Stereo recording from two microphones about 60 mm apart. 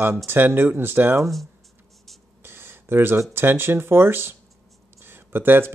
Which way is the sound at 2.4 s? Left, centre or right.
Right.